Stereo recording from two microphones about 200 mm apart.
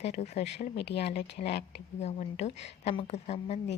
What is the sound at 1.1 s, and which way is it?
A woman's voice, 30° left (ahead or behind).